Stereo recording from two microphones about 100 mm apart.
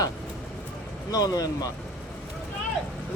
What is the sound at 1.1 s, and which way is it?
Speech, 40° left (ahead or behind).